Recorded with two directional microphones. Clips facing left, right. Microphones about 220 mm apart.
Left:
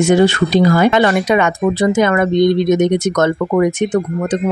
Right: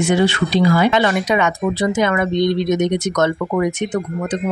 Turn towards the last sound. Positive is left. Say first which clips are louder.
# left 5 dB
turn(degrees=50)  # may be behind; listen again after turning